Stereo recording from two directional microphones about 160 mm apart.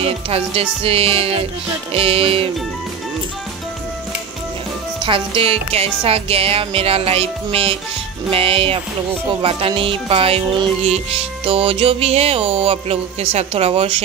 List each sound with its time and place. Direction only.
0.0 s music: 35° right (ahead or behind)
5.0 s music: 35° right (ahead or behind)